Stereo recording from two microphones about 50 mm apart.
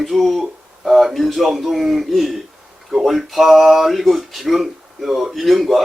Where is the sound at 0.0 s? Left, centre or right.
Centre.